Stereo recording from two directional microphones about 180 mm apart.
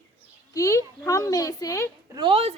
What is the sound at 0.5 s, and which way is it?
A woman's voice, 15° left (ahead or behind).